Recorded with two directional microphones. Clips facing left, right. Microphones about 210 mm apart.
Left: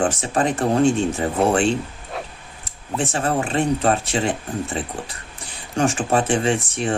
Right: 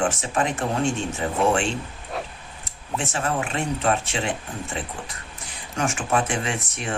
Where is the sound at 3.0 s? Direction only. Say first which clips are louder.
Left 5 dB; 35° left (ahead or behind).